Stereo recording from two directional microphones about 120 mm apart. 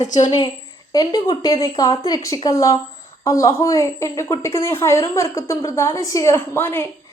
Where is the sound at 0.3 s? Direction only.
35° left (ahead or behind); by 6.9 s 20° left (ahead or behind).